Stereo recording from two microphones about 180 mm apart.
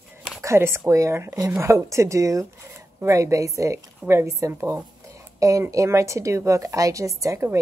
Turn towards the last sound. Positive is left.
turn(degrees=-15)  # may be behind; listen again after turning